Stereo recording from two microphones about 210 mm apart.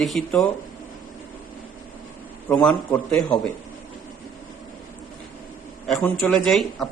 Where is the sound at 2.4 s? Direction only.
5° left (ahead or behind).